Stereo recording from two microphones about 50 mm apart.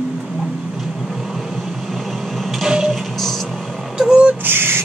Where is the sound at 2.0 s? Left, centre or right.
Centre.